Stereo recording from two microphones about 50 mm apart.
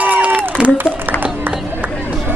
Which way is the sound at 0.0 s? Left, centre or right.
Right.